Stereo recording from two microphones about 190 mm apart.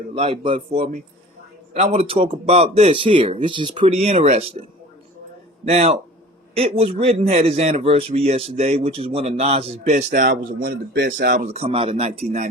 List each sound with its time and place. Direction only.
0.1 s a man's voice: 30° right (ahead or behind)
5.6 s a man's voice: 35° right (ahead or behind)
10.1 s speech: 50° right (ahead or behind); by 12.5 s 35° right (ahead or behind)